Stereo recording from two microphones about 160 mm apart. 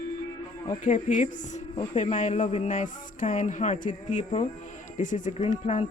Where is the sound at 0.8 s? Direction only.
55° left (ahead or behind).